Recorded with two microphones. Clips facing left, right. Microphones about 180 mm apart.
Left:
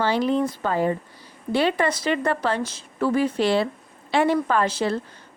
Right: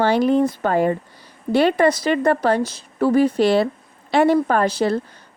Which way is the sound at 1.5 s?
45° right (ahead or behind).